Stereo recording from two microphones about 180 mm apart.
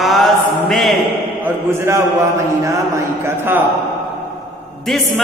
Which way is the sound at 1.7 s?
15° right (ahead or behind).